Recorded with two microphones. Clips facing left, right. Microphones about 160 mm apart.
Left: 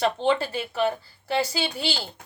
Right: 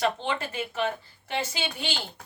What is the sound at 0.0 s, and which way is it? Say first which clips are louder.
A woman's voice: left 5 dB; 35° left (ahead or behind).